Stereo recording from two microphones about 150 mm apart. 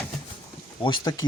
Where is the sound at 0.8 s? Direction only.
30° left (ahead or behind).